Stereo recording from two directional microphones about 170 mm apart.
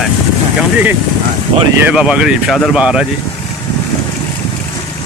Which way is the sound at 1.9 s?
5° right (ahead or behind).